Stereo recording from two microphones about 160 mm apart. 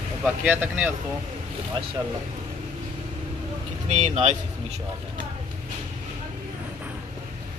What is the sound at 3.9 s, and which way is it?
Speech, 45° right (ahead or behind).